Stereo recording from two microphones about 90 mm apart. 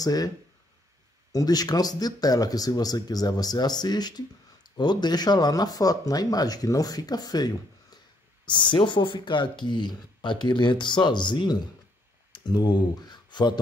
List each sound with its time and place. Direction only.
0.0 s speech: 45° left (ahead or behind)
1.3 s speech: 45° left (ahead or behind)
8.5 s speech: 60° left (ahead or behind)